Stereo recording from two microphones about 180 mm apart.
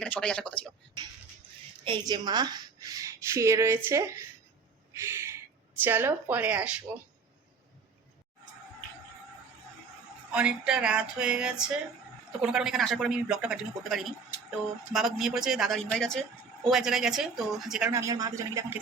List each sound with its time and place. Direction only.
0.0 s speech: 5° left (ahead or behind)
1.8 s a woman's voice: 25° right (ahead or behind)
4.9 s a sound: 15° right (ahead or behind)
5.8 s speech: 10° right (ahead or behind)
10.3 s speech: 5° right (ahead or behind)
17.8 s speech: 15° right (ahead or behind)